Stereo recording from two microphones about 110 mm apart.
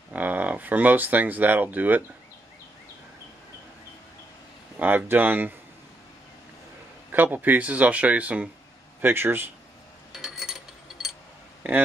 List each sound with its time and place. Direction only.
0.1 s speech: 15° right (ahead or behind)
4.7 s speech: 15° right (ahead or behind)
7.1 s speech: 15° right (ahead or behind)
10.1 s a sound: 5° right (ahead or behind)